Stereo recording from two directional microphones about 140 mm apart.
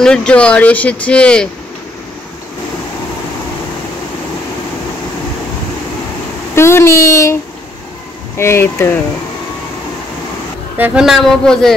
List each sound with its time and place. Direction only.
0.0 s speech: 5° left (ahead or behind)
6.5 s speech: 20° left (ahead or behind)
8.4 s speech: 20° left (ahead or behind)
10.8 s speech: 5° right (ahead or behind)